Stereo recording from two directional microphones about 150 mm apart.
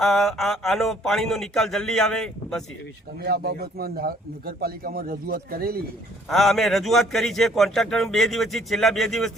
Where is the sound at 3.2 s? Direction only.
90° right.